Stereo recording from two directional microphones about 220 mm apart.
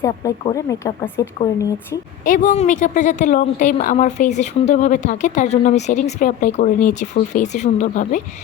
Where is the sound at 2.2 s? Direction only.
35° left (ahead or behind).